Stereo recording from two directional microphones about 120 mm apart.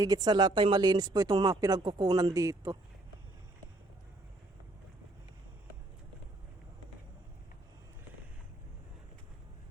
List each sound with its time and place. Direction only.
0.0 s speech: 35° right (ahead or behind)